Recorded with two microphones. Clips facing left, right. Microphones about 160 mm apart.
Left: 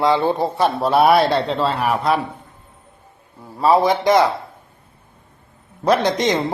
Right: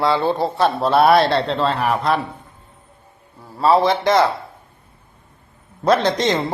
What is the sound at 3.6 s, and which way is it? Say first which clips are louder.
Speech: even; 15° left (ahead or behind).